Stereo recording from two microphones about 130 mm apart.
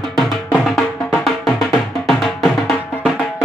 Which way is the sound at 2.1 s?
Centre (ahead or behind).